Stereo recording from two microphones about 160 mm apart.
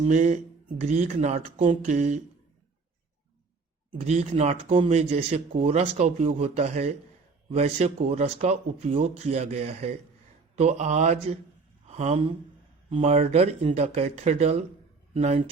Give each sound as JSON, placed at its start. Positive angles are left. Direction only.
{"t": 0.0, "sound": "speech", "side_deg": -45}
{"t": 4.0, "sound": "speech", "side_deg": -45}